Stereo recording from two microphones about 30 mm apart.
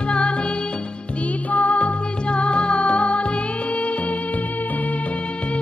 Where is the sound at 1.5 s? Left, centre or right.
Left.